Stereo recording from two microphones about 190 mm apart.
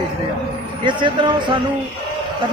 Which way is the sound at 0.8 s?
25° right (ahead or behind).